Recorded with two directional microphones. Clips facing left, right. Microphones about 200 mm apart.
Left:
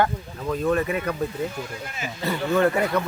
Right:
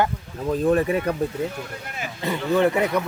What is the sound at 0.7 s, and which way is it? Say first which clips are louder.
Speech: right 3 dB; 35° right (ahead or behind).